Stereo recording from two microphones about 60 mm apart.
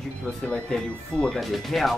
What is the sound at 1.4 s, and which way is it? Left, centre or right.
Speech, centre.